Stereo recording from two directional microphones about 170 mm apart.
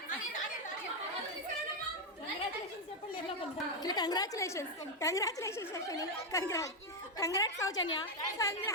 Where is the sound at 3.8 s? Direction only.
25° left (ahead or behind).